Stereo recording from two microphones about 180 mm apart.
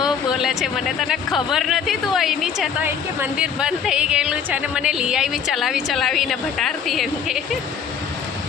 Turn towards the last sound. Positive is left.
turn(degrees=0)  # may be behind; listen again after turning